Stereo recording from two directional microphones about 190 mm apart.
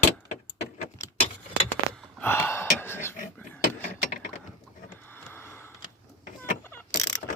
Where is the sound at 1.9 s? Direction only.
10° left (ahead or behind).